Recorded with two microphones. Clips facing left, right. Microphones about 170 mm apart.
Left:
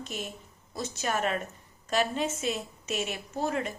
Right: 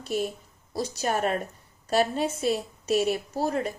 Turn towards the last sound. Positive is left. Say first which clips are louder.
# right 3 dB
turn(degrees=-40)  # may be behind; listen again after turning